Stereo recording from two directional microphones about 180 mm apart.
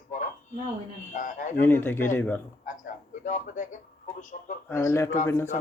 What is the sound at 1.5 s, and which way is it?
Speech, 10° left (ahead or behind).